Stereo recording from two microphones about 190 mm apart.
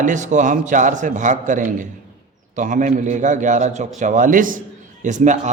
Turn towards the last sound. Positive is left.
turn(degrees=-40)  # may be behind; listen again after turning